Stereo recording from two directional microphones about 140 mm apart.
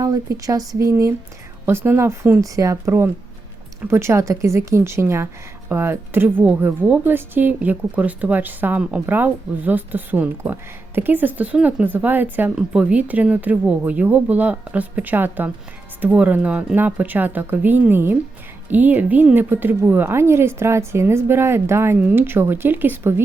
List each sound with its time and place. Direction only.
0.0 s a woman's voice: 25° right (ahead or behind)